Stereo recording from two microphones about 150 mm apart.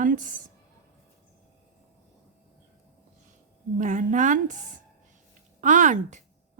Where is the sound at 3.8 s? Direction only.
60° right (ahead or behind).